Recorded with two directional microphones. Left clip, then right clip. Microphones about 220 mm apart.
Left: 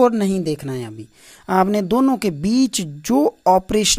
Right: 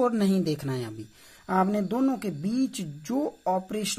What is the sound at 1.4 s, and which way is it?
Speech, 40° left (ahead or behind).